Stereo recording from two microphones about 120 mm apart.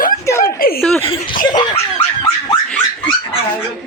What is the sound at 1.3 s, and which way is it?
Laughter, 40° left (ahead or behind).